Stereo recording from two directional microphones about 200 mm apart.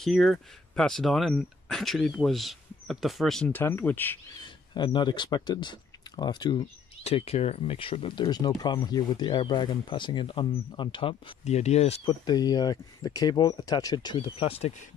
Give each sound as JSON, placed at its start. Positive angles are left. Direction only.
{"t": 0.0, "sound": "speech", "side_deg": 0}